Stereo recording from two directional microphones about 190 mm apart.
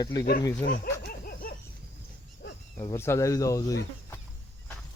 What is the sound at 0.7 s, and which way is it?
Dog, 50° left (ahead or behind).